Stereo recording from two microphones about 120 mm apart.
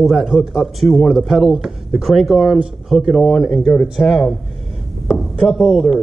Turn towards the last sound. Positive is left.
turn(degrees=-5)  # may be behind; listen again after turning